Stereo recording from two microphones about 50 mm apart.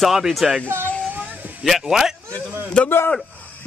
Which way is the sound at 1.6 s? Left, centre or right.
Centre.